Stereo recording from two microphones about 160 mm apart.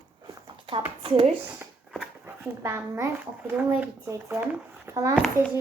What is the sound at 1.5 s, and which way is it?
A child's voice, 5° right (ahead or behind).